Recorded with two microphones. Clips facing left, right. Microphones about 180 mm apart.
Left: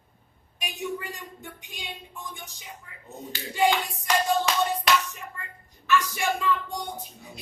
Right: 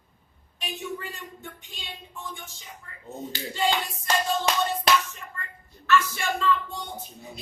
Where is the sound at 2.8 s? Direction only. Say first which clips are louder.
Right 1 dB; 10° left (ahead or behind).